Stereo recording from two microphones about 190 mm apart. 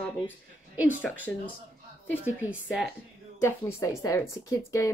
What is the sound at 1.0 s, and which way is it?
Speech, 10° left (ahead or behind).